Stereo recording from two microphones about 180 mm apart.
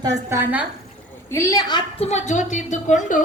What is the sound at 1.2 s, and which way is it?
A woman's voice, 15° left (ahead or behind).